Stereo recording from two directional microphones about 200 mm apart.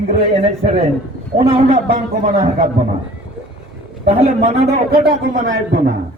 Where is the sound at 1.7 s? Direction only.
40° right (ahead or behind).